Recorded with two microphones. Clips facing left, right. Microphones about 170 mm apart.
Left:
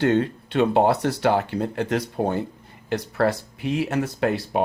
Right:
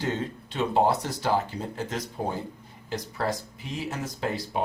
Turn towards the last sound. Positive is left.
turn(degrees=65)  # may be behind; listen again after turning